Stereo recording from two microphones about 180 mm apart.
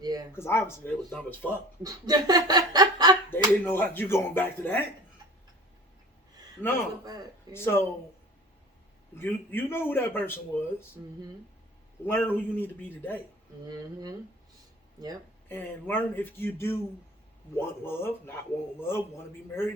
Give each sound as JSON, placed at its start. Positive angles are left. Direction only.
{"t": 0.0, "sound": "a sound", "side_deg": -20}
{"t": 0.3, "sound": "a man's voice", "side_deg": 15}
{"t": 1.8, "sound": "a sound", "side_deg": -20}
{"t": 3.2, "sound": "a man's voice", "side_deg": 10}
{"t": 6.6, "sound": "a man's voice", "side_deg": 10}
{"t": 9.1, "sound": "a man's voice", "side_deg": 10}
{"t": 12.0, "sound": "a man's voice", "side_deg": 10}
{"t": 13.7, "sound": "a sound", "side_deg": -20}
{"t": 15.4, "sound": "a man's voice", "side_deg": 10}